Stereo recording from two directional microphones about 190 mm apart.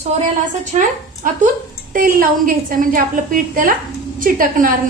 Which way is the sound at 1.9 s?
50° right (ahead or behind).